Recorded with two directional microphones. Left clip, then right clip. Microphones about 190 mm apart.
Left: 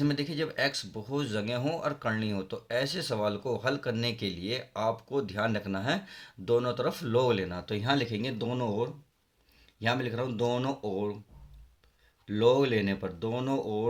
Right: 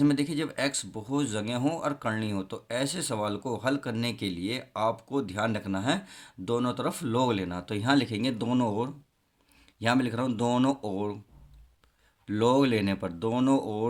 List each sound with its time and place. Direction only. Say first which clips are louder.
0.0 s speech: right 4 dB; 30° right (ahead or behind)
12.2 s speech: even; 45° right (ahead or behind)